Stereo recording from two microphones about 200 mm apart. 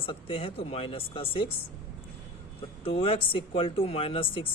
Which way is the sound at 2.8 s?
30° left (ahead or behind).